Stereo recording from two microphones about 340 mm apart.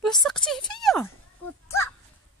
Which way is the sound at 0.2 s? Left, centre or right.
Centre.